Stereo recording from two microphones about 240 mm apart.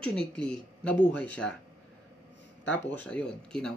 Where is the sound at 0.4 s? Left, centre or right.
Centre.